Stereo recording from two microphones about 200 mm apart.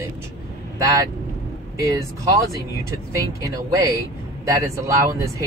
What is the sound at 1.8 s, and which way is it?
Speech, 15° right (ahead or behind).